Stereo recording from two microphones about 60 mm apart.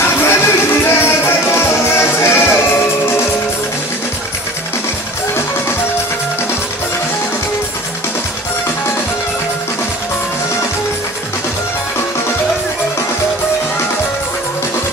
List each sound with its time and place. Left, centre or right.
0.0 s music: left